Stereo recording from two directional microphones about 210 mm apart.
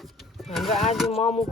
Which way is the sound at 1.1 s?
30° left (ahead or behind).